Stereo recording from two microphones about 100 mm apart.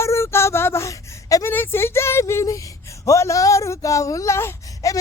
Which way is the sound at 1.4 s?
25° left (ahead or behind).